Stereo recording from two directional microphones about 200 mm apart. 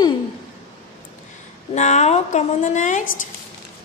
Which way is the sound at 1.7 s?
35° left (ahead or behind).